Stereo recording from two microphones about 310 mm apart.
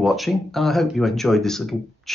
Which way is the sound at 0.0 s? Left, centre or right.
Centre.